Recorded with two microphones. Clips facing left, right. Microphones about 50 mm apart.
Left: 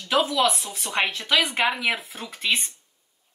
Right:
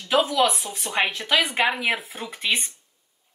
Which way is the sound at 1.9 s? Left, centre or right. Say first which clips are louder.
Right 2 dB; right.